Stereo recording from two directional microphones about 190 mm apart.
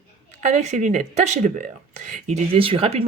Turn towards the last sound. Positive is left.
turn(degrees=-30)  # may be behind; listen again after turning